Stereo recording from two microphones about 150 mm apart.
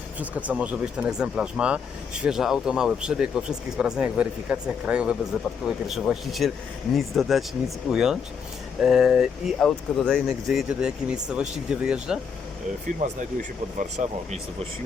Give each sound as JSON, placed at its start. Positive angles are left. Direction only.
{"t": 0.2, "sound": "speech", "side_deg": -10}
{"t": 13.7, "sound": "speech", "side_deg": -50}